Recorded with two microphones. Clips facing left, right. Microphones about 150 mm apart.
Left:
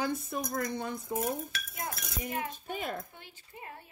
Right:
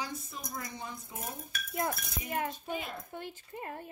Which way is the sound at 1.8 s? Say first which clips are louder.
Left 1 dB; 45° right (ahead or behind).